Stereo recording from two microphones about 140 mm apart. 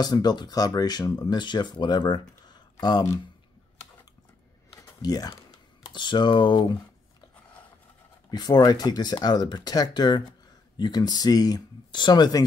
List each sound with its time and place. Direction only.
0.0 s speech: 30° left (ahead or behind)
5.0 s speech: 30° left (ahead or behind)
8.3 s speech: 30° left (ahead or behind)